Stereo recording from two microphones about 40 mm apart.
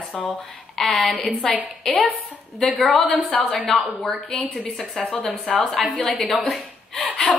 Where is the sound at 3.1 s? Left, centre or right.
Left.